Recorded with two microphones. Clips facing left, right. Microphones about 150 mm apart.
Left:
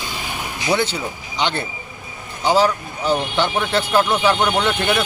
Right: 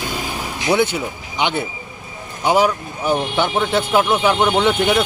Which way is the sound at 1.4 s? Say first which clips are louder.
Right 2 dB; 10° right (ahead or behind).